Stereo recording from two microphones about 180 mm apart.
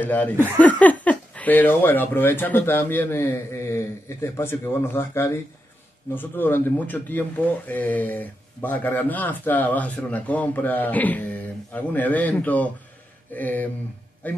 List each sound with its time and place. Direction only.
0.0 s speech: 10° left (ahead or behind)